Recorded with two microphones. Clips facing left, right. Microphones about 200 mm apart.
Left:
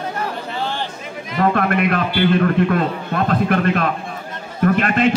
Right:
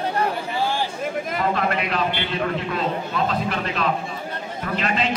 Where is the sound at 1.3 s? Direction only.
55° left (ahead or behind).